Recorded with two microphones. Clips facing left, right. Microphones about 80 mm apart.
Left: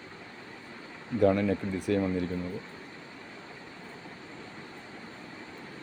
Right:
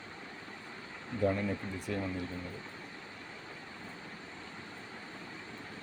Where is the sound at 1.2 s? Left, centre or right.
Left.